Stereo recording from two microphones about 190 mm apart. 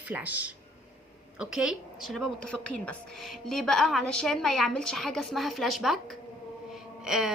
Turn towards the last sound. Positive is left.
turn(degrees=0)  # may be behind; listen again after turning